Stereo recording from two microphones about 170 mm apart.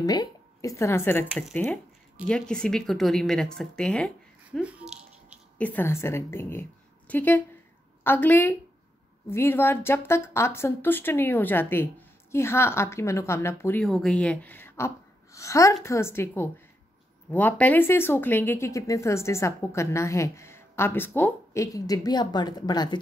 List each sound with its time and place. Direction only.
0.0 s speech: 25° left (ahead or behind)
2.2 s speech: 5° left (ahead or behind)
4.5 s squish: 10° right (ahead or behind)
5.6 s a woman's voice: 10° left (ahead or behind)
13.8 s speech: 5° left (ahead or behind); by 22.9 s 25° left (ahead or behind)